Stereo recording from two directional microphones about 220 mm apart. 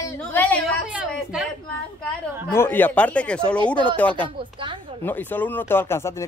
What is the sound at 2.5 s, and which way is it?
Speech, 10° left (ahead or behind).